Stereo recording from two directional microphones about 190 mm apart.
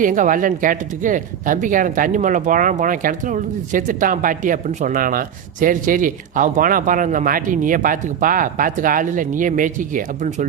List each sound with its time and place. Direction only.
0.0 s speech: 45° right (ahead or behind)